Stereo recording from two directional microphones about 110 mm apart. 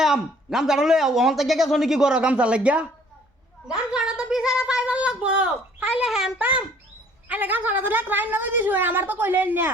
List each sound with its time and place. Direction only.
0.0 s speech: 5° right (ahead or behind)